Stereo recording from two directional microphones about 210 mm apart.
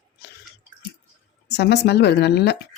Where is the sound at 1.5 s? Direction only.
50° left (ahead or behind).